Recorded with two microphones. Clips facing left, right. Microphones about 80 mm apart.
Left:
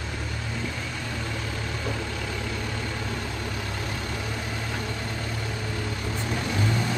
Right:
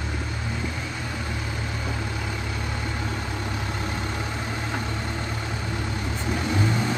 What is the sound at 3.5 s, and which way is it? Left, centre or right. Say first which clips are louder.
Vehicle: right 2 dB; centre.